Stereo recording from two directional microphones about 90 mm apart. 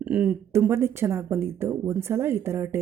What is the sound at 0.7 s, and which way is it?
Speech, 30° right (ahead or behind).